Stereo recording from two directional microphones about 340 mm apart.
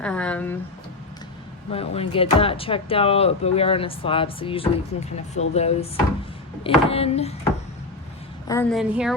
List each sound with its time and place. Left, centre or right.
0.0 s a woman's voice: centre
1.7 s speech: centre
8.4 s a woman's voice: centre